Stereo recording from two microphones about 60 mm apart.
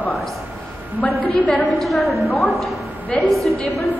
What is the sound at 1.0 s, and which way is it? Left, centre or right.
Speech, left.